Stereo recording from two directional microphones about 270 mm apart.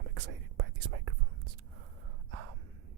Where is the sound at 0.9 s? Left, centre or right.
Right.